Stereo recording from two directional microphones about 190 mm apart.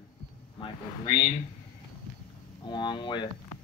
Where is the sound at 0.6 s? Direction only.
25° left (ahead or behind).